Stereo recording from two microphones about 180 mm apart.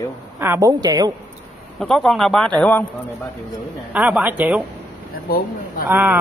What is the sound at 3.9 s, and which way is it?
Speech, 10° right (ahead or behind).